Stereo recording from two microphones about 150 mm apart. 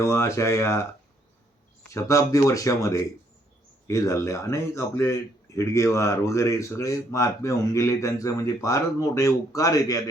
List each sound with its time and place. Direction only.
0.0 s speech: 20° left (ahead or behind)
1.9 s speech: 20° left (ahead or behind)